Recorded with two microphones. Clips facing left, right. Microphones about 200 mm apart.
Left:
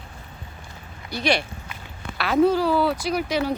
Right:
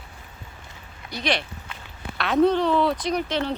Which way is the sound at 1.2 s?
10° left (ahead or behind).